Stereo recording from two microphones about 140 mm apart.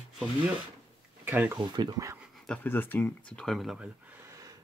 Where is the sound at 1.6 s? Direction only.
30° right (ahead or behind).